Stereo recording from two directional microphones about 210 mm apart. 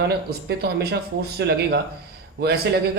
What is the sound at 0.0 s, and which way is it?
Speech, 50° right (ahead or behind).